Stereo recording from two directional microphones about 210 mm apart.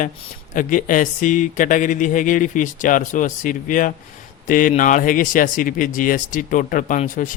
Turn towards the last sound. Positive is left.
turn(degrees=40)  # may be behind; listen again after turning